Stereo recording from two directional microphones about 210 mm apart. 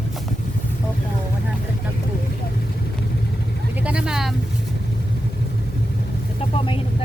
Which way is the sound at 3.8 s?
5° right (ahead or behind).